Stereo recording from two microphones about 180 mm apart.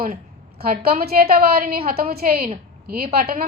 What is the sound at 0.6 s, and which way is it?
A woman's voice, 60° right (ahead or behind).